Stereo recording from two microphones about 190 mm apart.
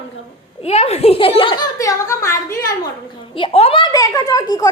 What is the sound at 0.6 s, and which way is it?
A child's voice, 35° left (ahead or behind).